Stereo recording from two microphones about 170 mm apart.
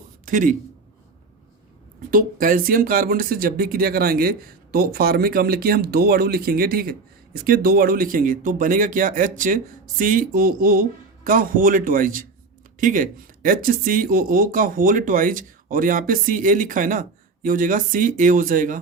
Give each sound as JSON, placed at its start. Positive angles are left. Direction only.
{"t": 0.3, "sound": "a man's voice", "side_deg": -50}
{"t": 2.0, "sound": "speech", "side_deg": -55}